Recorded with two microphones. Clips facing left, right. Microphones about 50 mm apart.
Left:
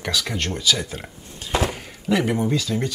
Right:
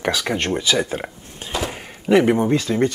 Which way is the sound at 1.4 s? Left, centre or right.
Right.